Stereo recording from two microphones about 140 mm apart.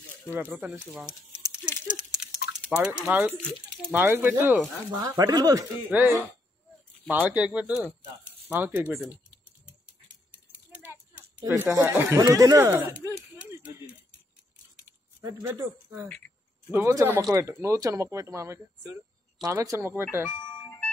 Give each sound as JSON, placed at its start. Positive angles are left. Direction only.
{"t": 0.3, "sound": "speech", "side_deg": -15}
{"t": 1.4, "sound": "a sound", "side_deg": -5}
{"t": 2.7, "sound": "speech", "side_deg": -10}
{"t": 4.9, "sound": "speech", "side_deg": -25}
{"t": 5.9, "sound": "speech", "side_deg": -15}
{"t": 10.7, "sound": "speech", "side_deg": -15}
{"t": 13.0, "sound": "a sound", "side_deg": -20}
{"t": 15.2, "sound": "speech", "side_deg": -15}
{"t": 16.1, "sound": "a sound", "side_deg": 10}
{"t": 16.7, "sound": "speech", "side_deg": -15}
{"t": 20.2, "sound": "music", "side_deg": 5}